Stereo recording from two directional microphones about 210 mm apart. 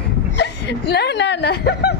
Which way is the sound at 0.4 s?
50° left (ahead or behind).